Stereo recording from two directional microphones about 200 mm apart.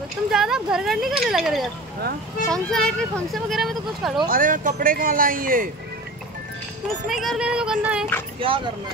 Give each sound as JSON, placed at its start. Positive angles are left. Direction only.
{"t": 0.3, "sound": "speech", "side_deg": 0}
{"t": 4.3, "sound": "speech", "side_deg": -40}
{"t": 7.1, "sound": "speech", "side_deg": 0}
{"t": 8.4, "sound": "speech", "side_deg": -25}